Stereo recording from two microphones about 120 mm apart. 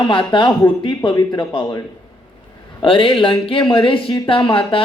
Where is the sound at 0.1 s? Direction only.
45° left (ahead or behind).